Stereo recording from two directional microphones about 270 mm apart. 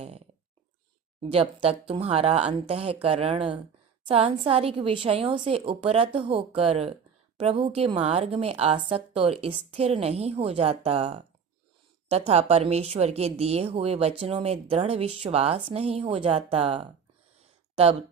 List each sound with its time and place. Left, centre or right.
1.2 s a woman's voice: right